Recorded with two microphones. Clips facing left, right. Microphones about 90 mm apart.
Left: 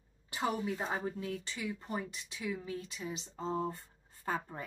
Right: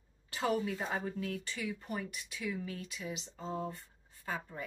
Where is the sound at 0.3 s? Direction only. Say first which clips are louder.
Right 1 dB; 20° left (ahead or behind).